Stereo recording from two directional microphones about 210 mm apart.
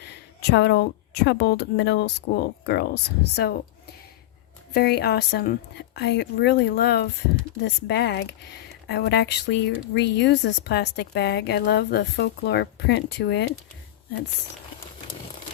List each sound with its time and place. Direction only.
0.5 s speech: 50° left (ahead or behind)
4.7 s speech: 50° left (ahead or behind)